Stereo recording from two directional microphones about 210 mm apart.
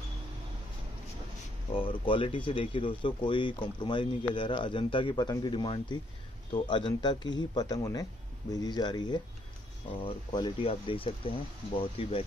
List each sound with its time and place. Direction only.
1.7 s speech: 25° left (ahead or behind)